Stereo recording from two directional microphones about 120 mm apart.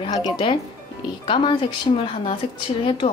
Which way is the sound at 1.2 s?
45° left (ahead or behind).